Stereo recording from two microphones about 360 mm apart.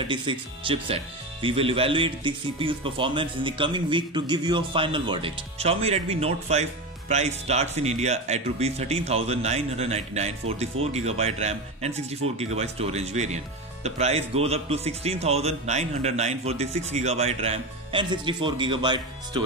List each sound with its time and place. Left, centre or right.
0.0 s speech: centre